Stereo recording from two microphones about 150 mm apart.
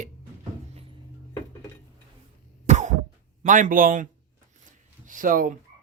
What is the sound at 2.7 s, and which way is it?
Cough, 50° right (ahead or behind).